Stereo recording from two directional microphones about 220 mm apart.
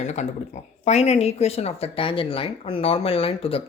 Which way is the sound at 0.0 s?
30° left (ahead or behind).